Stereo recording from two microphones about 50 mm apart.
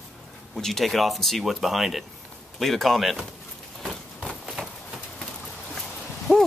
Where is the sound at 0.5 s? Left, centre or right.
Centre.